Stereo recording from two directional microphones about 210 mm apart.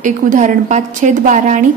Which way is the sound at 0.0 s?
35° right (ahead or behind).